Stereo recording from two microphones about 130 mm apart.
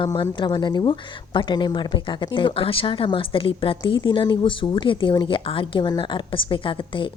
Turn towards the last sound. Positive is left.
turn(degrees=40)  # may be behind; listen again after turning